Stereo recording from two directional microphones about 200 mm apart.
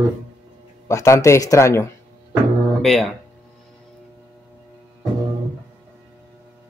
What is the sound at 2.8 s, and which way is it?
Speech, centre (ahead or behind).